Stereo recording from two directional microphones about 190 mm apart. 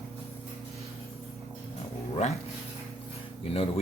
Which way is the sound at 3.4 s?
30° left (ahead or behind).